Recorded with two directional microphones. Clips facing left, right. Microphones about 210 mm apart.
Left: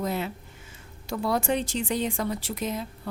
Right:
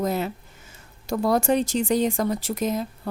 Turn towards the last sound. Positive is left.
turn(degrees=-45)  # may be behind; listen again after turning